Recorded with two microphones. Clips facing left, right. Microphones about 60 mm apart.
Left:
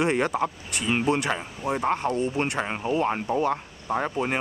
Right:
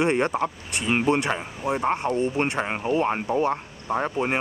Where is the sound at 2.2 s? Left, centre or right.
Right.